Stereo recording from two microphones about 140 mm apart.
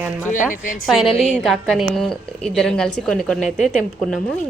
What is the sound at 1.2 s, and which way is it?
A woman's voice, 5° left (ahead or behind).